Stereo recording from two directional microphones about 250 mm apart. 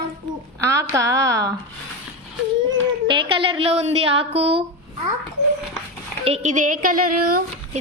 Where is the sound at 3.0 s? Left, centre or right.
Centre.